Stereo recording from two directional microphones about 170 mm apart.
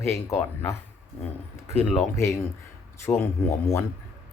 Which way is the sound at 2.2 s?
15° left (ahead or behind).